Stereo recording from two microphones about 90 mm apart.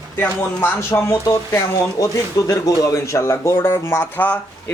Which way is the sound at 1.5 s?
40° left (ahead or behind).